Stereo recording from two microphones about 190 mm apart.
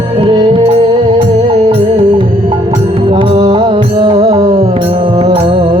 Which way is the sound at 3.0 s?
25° right (ahead or behind).